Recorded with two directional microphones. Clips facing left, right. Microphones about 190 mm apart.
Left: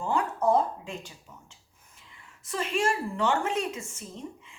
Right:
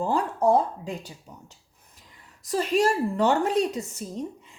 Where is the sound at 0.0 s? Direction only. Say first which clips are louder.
Right 3 dB; 35° right (ahead or behind).